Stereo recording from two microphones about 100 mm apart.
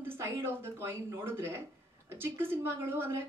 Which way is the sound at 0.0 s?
25° right (ahead or behind).